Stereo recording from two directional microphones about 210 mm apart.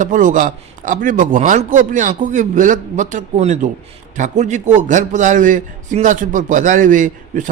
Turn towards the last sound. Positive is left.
turn(degrees=-40)  # may be behind; listen again after turning